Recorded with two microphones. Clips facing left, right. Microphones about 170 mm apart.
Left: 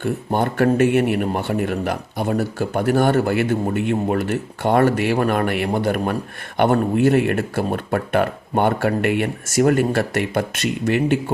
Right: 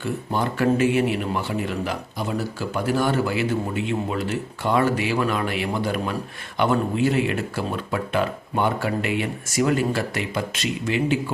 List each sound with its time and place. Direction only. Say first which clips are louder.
0.0 s speech: left 4 dB; 55° left (ahead or behind)